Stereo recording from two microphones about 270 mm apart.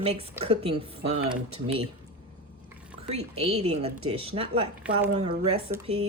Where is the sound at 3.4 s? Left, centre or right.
Right.